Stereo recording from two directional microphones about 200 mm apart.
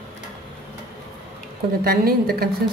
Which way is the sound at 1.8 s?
50° right (ahead or behind).